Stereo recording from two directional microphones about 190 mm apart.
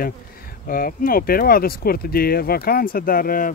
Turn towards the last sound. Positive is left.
turn(degrees=50)  # may be behind; listen again after turning